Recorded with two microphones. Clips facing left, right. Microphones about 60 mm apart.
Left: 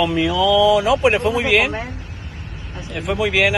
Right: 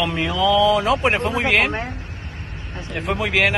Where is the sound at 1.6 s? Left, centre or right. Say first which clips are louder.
Even; right.